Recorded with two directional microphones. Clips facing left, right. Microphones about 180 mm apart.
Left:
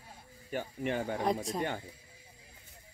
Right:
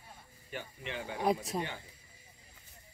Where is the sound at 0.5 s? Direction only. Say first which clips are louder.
Left 8 dB; 50° left (ahead or behind).